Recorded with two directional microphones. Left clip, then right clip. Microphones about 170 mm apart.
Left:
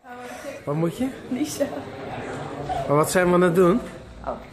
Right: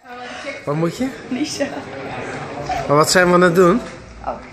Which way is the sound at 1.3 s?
15° left (ahead or behind).